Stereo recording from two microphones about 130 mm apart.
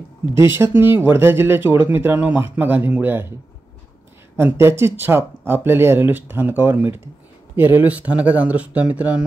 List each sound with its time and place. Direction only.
0.4 s speech: 20° right (ahead or behind)
4.4 s speech: 20° right (ahead or behind)